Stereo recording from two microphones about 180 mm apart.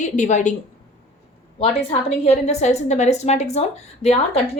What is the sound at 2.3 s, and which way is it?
Speech, 35° left (ahead or behind).